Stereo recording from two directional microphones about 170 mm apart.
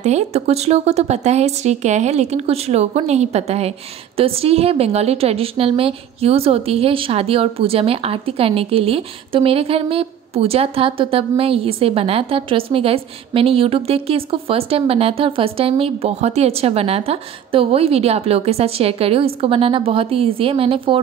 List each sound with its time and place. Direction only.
0.0 s a woman's voice: 40° right (ahead or behind)